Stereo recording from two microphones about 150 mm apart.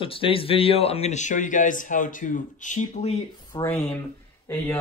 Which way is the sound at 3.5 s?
15° left (ahead or behind).